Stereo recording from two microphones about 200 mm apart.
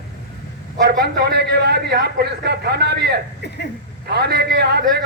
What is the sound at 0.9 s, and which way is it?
A man's voice, 55° right (ahead or behind).